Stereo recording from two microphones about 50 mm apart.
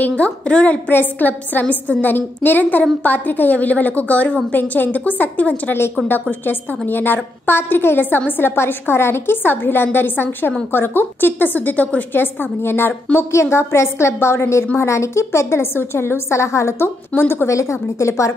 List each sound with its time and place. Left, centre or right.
0.2 s a woman's voice: left
0.8 s a woman's voice: left
6.4 s a woman's voice: left
12.1 s a woman's voice: left
13.3 s a woman's voice: left
14.8 s a woman's voice: left
17.1 s a woman's voice: left
17.5 s a woman's voice: left